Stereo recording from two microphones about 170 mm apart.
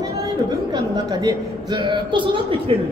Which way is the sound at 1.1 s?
25° right (ahead or behind).